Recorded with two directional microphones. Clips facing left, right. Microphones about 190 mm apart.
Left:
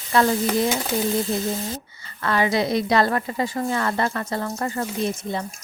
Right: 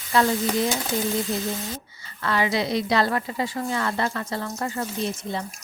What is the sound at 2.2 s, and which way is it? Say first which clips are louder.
A woman's voice: left 3 dB; 50° left (ahead or behind).